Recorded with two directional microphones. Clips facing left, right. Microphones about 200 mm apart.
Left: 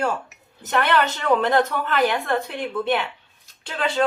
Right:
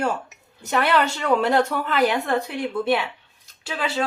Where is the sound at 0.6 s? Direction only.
10° right (ahead or behind).